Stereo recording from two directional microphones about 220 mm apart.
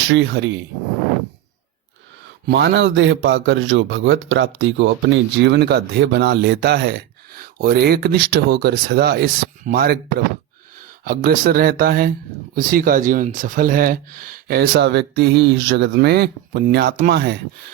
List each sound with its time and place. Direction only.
0.1 s a man's voice: 50° right (ahead or behind)
2.5 s a man's voice: 55° right (ahead or behind)